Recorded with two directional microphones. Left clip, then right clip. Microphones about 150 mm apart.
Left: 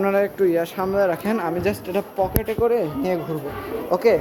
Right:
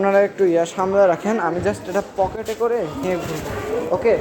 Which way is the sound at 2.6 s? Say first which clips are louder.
Even; 75° left (ahead or behind).